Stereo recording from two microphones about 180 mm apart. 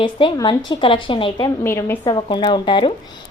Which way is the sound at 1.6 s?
15° left (ahead or behind).